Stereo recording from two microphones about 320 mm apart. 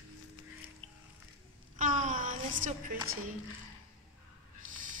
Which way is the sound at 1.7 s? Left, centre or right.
Right.